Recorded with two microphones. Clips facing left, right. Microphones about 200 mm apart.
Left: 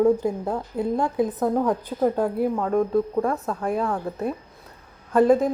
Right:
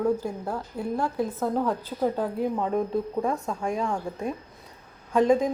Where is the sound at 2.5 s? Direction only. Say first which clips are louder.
Left 4 dB; 5° right (ahead or behind).